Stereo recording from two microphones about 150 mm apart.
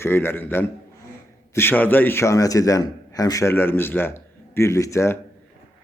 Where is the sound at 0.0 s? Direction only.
15° left (ahead or behind).